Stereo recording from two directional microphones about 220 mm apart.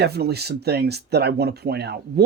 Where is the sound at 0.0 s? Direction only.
45° right (ahead or behind).